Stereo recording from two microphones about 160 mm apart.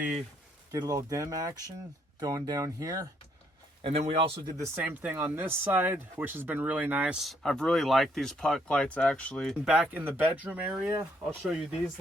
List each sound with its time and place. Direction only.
0.7 s speech: 20° right (ahead or behind)
3.8 s speech: 40° right (ahead or behind)
4.4 s speech: 20° right (ahead or behind)